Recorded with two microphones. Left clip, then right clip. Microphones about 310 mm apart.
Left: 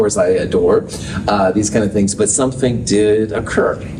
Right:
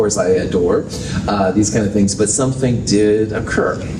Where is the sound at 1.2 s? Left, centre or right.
Left.